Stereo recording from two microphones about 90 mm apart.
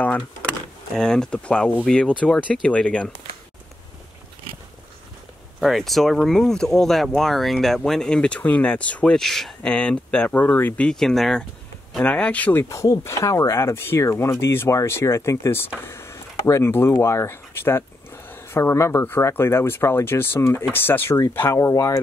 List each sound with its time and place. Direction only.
0.0 s power windows: 15° left (ahead or behind)
0.9 s speech: 5° left (ahead or behind)
5.6 s speech: centre (ahead or behind)
9.2 s speech: 5° left (ahead or behind)
12.0 s speech: 15° left (ahead or behind)
12.6 s speech: 35° left (ahead or behind)
15.8 s vehicle: 30° left (ahead or behind)
16.4 s speech: 35° left (ahead or behind)